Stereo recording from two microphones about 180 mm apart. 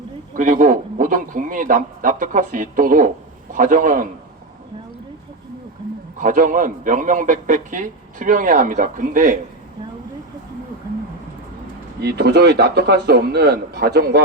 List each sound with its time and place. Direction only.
0.3 s a man's voice: 45° right (ahead or behind)
6.1 s a man's voice: 50° right (ahead or behind)
12.0 s a man's voice: 65° right (ahead or behind)